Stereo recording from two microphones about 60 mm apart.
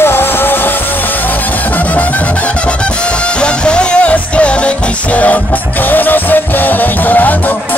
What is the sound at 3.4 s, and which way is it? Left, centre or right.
Music, centre.